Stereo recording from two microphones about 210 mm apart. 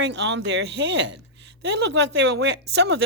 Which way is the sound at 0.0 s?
55° right (ahead or behind).